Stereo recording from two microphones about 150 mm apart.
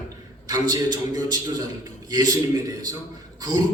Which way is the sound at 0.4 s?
25° right (ahead or behind).